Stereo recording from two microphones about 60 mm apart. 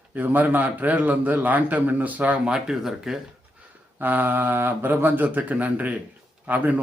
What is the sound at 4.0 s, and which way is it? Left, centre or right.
A man's voice, right.